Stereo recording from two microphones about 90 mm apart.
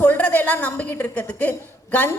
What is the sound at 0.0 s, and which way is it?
A woman's voice, 20° left (ahead or behind).